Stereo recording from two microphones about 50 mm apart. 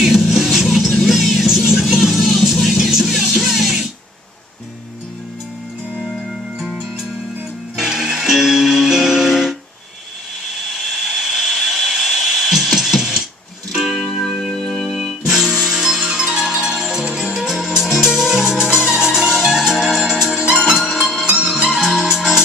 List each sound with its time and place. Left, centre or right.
0.0 s music: centre
6.7 s music: centre
11.2 s music: centre
14.0 s music: centre
15.3 s music: centre
21.2 s music: centre
21.7 s music: centre